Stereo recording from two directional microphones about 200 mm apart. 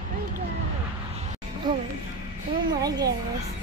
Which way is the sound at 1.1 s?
35° right (ahead or behind).